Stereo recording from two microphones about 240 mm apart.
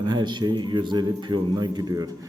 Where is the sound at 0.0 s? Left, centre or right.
Centre.